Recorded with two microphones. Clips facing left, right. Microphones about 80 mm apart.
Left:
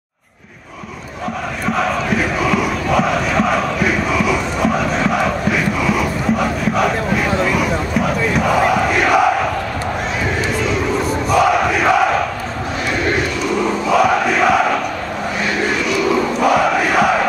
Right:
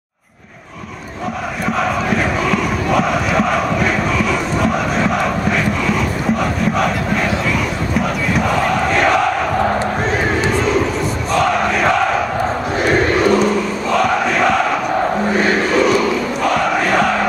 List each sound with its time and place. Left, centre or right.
1.8 s crowd: centre
11.3 s crowd: centre
13.8 s crowd: centre
15.3 s crowd: right
16.4 s crowd: centre